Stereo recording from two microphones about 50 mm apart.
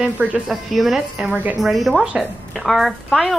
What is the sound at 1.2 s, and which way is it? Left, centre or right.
Speech, right.